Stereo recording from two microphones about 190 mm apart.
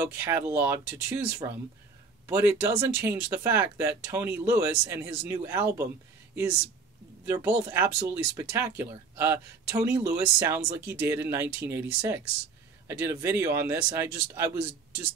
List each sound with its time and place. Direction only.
0.2 s speech: 15° right (ahead or behind)
7.2 s speech: 10° right (ahead or behind)